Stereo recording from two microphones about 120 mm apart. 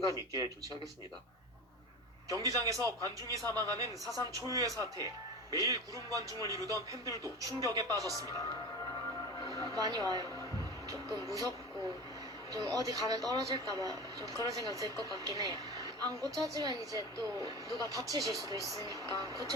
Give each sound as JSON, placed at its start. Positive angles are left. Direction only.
{"t": 0.0, "sound": "speech", "side_deg": -30}
{"t": 2.3, "sound": "speech", "side_deg": -30}
{"t": 9.5, "sound": "speech", "side_deg": -35}
{"t": 12.5, "sound": "speech", "side_deg": -30}